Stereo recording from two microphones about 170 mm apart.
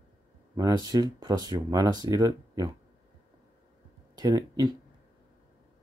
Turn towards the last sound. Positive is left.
turn(degrees=-20)  # may be behind; listen again after turning